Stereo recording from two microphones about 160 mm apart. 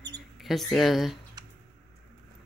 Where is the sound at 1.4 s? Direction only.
25° right (ahead or behind).